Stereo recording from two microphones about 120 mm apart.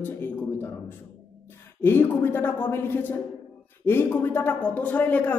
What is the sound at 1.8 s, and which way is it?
Speech, 20° left (ahead or behind).